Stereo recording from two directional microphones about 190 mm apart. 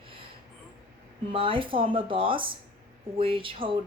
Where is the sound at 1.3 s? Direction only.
30° right (ahead or behind).